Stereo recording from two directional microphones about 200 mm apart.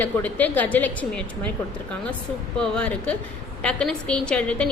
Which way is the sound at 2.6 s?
5° left (ahead or behind).